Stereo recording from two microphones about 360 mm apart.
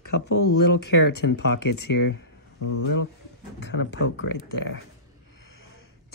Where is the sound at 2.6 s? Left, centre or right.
Left.